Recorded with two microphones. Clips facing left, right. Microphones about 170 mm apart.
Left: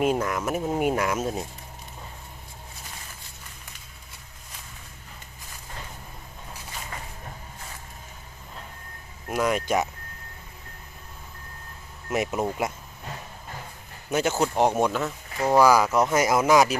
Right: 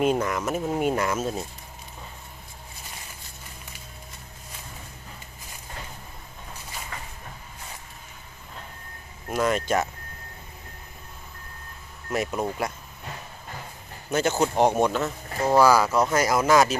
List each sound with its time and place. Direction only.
0.0 s speech: centre (ahead or behind)
0.4 s speech: 10° left (ahead or behind)
9.3 s speech: 10° left (ahead or behind)
12.0 s speech: 20° left (ahead or behind)
14.1 s speech: 10° left (ahead or behind)
15.5 s speech: 15° left (ahead or behind)